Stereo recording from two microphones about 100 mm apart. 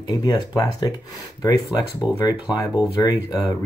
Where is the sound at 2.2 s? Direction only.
40° left (ahead or behind).